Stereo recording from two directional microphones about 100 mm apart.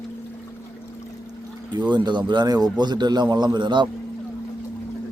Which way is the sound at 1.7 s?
50° right (ahead or behind).